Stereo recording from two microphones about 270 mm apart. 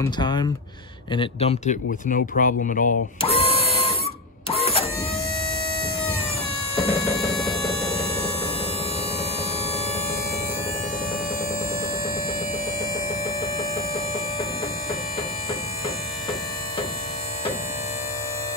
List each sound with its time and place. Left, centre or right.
0.0 s a man's voice: centre
3.2 s printer: left
6.7 s music: left